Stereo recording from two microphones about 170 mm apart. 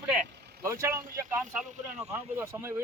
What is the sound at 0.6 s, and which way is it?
A man's voice, 15° right (ahead or behind).